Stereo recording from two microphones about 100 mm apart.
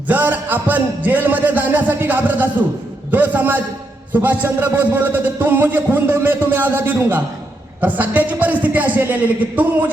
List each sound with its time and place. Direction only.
0.1 s a man's voice: 15° right (ahead or behind)